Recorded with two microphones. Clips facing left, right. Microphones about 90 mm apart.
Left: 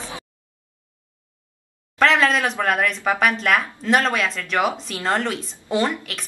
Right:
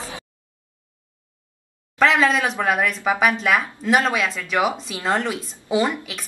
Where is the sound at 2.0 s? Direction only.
Centre (ahead or behind).